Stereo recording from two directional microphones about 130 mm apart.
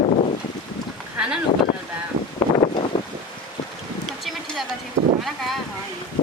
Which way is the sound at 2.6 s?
50° left (ahead or behind).